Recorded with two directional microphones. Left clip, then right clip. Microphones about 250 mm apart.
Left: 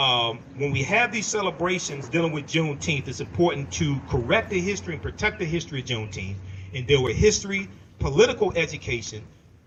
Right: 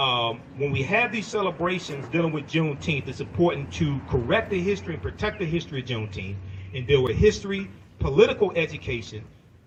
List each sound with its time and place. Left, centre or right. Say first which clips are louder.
0.0 s a man's voice: left 2 dB; left